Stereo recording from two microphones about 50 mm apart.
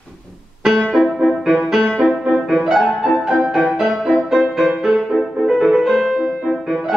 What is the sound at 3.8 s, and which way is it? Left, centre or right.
Music, centre.